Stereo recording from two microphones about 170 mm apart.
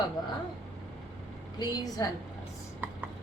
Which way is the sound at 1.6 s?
25° left (ahead or behind).